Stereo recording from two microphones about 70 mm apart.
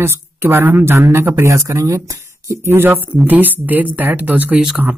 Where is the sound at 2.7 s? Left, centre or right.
Right.